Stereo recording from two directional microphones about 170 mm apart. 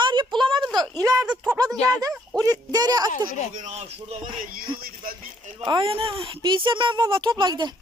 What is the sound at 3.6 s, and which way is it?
Speech, 40° right (ahead or behind).